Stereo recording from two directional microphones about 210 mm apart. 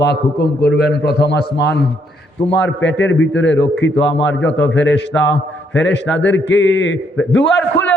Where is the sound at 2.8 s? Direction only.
60° left (ahead or behind).